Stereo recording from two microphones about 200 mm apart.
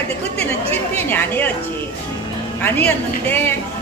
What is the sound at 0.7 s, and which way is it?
Speech, 10° left (ahead or behind).